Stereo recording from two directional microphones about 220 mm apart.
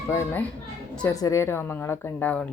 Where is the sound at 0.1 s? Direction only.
10° left (ahead or behind).